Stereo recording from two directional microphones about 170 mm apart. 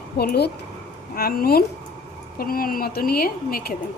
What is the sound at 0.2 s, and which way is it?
A woman's voice, 70° left (ahead or behind).